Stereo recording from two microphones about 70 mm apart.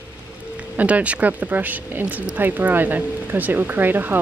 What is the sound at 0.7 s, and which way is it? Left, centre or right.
Speech, right.